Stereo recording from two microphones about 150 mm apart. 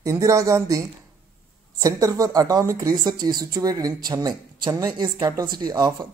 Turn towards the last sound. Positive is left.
turn(degrees=-30)  # may be behind; listen again after turning